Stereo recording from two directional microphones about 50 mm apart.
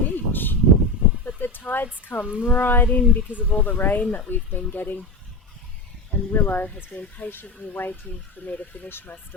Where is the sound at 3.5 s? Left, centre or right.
Left.